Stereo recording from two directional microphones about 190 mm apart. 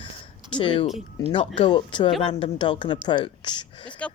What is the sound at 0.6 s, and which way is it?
Speech, 25° left (ahead or behind).